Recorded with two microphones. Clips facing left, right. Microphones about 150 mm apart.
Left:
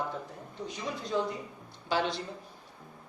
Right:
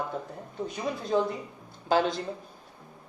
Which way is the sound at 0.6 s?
55° right (ahead or behind).